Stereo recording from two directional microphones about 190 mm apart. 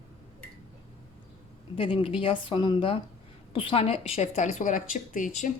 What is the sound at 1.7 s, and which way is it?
A woman's voice, 25° left (ahead or behind).